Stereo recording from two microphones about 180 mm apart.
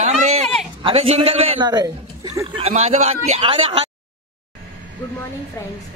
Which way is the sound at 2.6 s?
40° right (ahead or behind).